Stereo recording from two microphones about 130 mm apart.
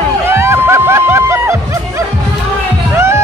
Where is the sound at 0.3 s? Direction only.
20° right (ahead or behind).